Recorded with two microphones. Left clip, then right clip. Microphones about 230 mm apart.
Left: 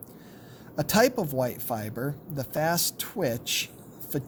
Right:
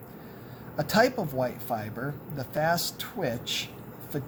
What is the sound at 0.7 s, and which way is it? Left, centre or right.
Speech, left.